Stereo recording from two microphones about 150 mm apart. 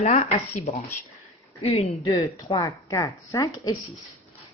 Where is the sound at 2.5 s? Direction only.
20° left (ahead or behind).